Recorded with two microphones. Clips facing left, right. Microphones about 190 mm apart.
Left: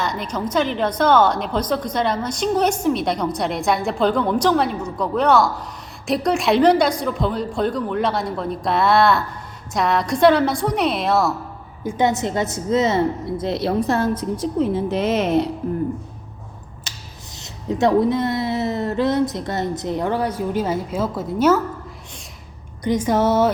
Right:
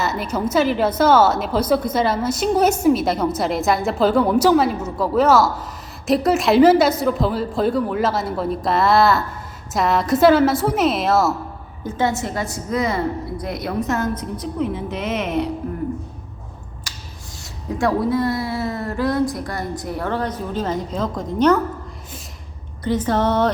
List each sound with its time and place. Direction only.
0.0 s a woman's voice: 5° right (ahead or behind)
11.8 s speech: 15° left (ahead or behind); by 15.4 s 30° left (ahead or behind)
16.9 s finger snapping: 25° left (ahead or behind)
17.4 s speech: 20° left (ahead or behind)
22.8 s a woman's voice: 15° left (ahead or behind)